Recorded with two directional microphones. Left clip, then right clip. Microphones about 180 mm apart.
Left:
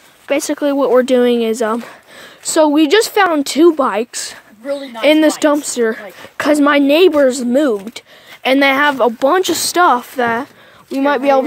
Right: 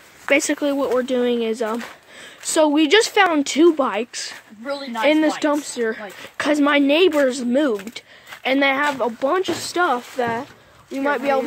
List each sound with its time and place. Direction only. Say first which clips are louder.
0.3 s speech: left 1 dB; 20° left (ahead or behind)
0.6 s a woman's voice: left 8 dB; 40° left (ahead or behind)
2.1 s a woman's voice: left 5 dB; 30° left (ahead or behind); by 11.4 s 60° left (ahead or behind)